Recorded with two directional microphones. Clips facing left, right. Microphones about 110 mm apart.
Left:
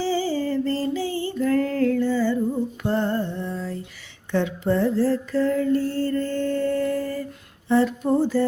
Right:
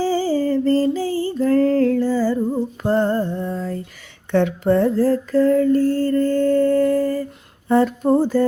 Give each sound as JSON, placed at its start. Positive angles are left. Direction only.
{"t": 0.0, "sound": "music", "side_deg": -40}
{"t": 4.3, "sound": "mantra", "side_deg": -60}
{"t": 7.7, "sound": "a sound", "side_deg": -45}